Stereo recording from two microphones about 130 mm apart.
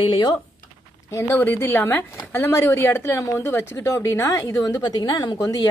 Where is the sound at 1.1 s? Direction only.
20° left (ahead or behind).